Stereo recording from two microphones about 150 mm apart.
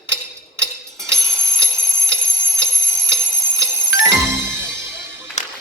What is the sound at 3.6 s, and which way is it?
Music, 20° right (ahead or behind).